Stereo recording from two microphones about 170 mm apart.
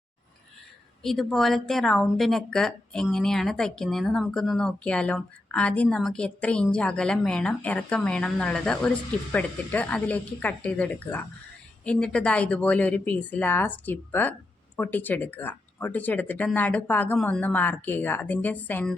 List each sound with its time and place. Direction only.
1.0 s speech: centre (ahead or behind)